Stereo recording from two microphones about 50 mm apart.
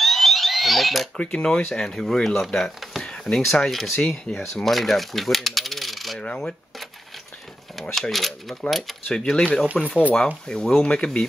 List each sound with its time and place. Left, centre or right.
0.0 s fire alarm: centre
1.1 s speech: left; by 6.1 s centre
6.1 s speech: centre
7.9 s speech: centre
9.0 s speech: centre